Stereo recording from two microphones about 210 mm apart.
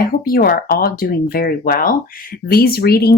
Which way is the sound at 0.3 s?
45° left (ahead or behind).